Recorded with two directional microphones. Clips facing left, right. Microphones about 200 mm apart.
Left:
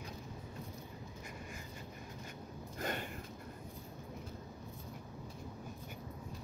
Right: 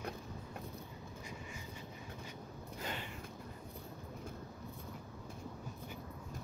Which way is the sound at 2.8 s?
50° left (ahead or behind).